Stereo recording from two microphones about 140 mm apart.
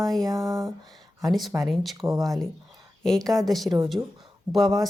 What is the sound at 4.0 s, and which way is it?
Mantra, 20° right (ahead or behind).